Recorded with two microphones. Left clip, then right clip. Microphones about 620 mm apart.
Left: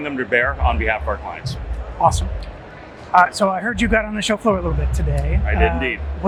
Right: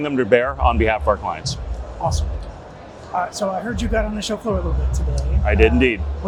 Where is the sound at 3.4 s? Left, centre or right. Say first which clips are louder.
Left 4 dB; left.